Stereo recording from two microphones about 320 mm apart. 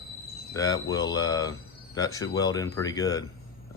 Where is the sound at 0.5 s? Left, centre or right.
Centre.